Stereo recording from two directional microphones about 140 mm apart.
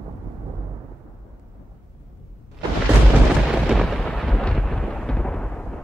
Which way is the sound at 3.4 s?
Centre (ahead or behind).